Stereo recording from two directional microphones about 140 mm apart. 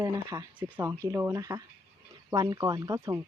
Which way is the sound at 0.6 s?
10° right (ahead or behind).